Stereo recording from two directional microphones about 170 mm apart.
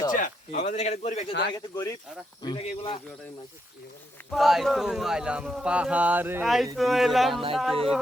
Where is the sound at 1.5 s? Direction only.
25° left (ahead or behind).